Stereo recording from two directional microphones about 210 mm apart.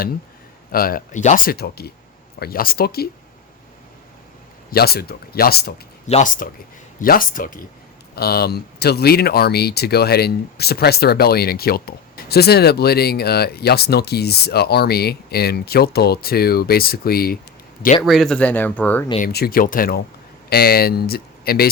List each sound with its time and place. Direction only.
0.7 s speech: 45° left (ahead or behind)
4.7 s speech: 50° left (ahead or behind)
6.1 s speech: 35° left (ahead or behind)
18.0 s speech: centre (ahead or behind)
19.2 s speech: 45° left (ahead or behind)